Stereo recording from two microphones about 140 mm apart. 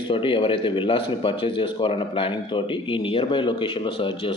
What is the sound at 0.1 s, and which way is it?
Speech, 40° left (ahead or behind).